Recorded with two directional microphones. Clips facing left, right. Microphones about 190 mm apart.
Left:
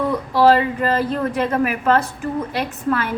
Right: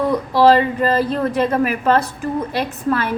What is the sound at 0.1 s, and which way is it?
A woman's voice, 35° right (ahead or behind).